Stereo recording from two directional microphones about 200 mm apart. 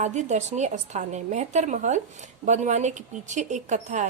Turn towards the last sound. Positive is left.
turn(degrees=-35)  # may be behind; listen again after turning